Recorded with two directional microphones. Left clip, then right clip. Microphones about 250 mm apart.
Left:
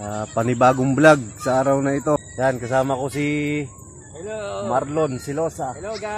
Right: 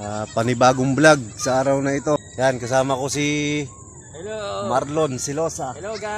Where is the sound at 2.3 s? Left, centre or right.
Centre.